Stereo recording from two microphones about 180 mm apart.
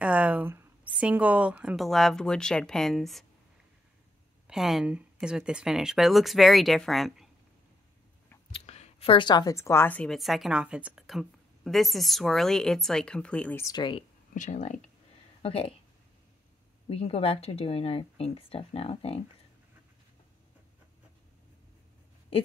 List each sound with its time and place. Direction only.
0.0 s a woman's voice: 5° right (ahead or behind)
4.5 s a woman's voice: centre (ahead or behind)
8.5 s a woman's voice: 35° left (ahead or behind); by 13.7 s 10° left (ahead or behind)
13.7 s speech: 25° left (ahead or behind)
14.3 s speech: 45° left (ahead or behind)
15.4 s speech: 30° left (ahead or behind)
16.9 s speech: 35° left (ahead or behind)